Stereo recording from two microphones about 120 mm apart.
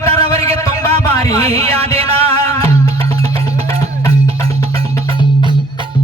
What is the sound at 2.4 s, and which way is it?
Music, 30° left (ahead or behind).